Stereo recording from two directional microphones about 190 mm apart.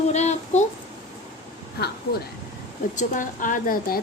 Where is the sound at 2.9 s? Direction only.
45° left (ahead or behind).